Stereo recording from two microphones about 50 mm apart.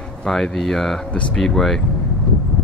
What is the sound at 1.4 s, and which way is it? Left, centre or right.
Speech, centre.